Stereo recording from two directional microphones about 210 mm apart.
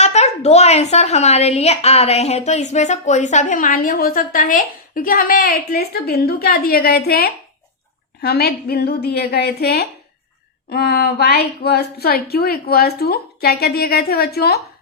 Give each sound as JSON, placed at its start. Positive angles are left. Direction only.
{"t": 0.0, "sound": "a woman's voice", "side_deg": 30}